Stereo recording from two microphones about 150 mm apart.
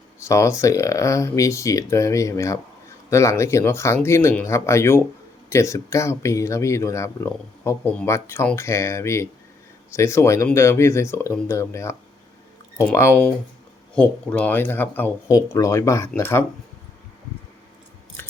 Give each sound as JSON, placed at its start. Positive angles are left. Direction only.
{"t": 0.2, "sound": "speech", "side_deg": 20}